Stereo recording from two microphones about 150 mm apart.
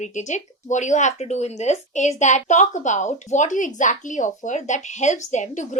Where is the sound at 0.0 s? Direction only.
55° left (ahead or behind).